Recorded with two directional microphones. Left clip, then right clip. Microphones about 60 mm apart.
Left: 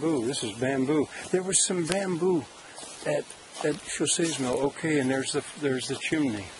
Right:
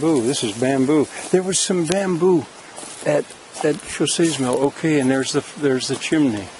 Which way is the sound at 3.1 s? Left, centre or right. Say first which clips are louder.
Right 9 dB; centre.